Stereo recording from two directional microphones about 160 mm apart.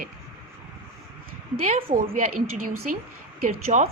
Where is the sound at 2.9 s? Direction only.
55° right (ahead or behind).